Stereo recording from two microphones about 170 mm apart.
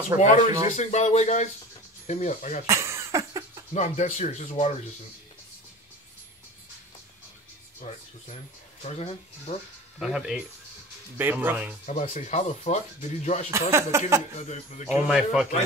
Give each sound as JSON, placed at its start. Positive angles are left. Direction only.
{"t": 0.1, "sound": "speech", "side_deg": -20}
{"t": 0.7, "sound": "speech", "side_deg": 45}
{"t": 2.6, "sound": "cough", "side_deg": -15}
{"t": 3.7, "sound": "speech", "side_deg": 45}
{"t": 8.8, "sound": "speech", "side_deg": 40}
{"t": 9.9, "sound": "speech", "side_deg": -5}
{"t": 11.8, "sound": "speech", "side_deg": 40}
{"t": 13.5, "sound": "speech", "side_deg": -15}
{"t": 14.3, "sound": "speech", "side_deg": 40}
{"t": 14.9, "sound": "speech", "side_deg": 0}